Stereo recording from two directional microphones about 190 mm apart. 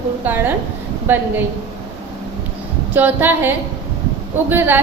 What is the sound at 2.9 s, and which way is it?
A woman's voice, 10° right (ahead or behind).